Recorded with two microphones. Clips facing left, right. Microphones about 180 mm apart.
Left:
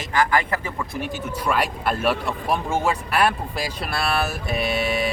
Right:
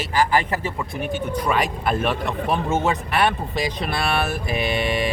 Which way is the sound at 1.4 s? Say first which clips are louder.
Left 1 dB; 5° left (ahead or behind).